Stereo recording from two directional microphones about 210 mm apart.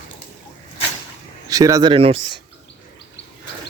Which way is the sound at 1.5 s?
15° right (ahead or behind).